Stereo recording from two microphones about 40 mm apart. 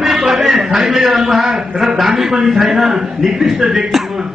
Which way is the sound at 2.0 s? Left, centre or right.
Centre.